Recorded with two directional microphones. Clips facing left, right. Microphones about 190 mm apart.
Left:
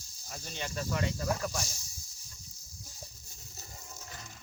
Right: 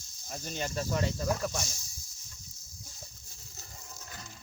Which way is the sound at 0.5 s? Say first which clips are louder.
Right 3 dB; 35° right (ahead or behind).